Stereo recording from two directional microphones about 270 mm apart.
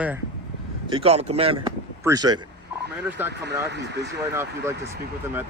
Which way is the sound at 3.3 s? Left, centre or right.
Right.